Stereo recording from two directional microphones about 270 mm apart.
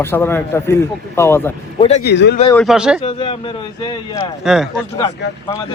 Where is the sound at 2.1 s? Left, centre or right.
Left.